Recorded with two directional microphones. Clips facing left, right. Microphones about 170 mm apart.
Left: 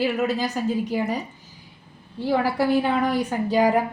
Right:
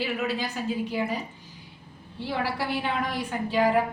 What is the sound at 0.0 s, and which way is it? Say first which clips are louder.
Speech: left 6 dB; 45° left (ahead or behind).